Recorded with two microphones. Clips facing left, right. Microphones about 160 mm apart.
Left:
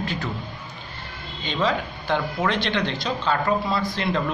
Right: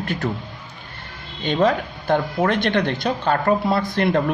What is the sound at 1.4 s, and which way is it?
A man's voice, 55° right (ahead or behind).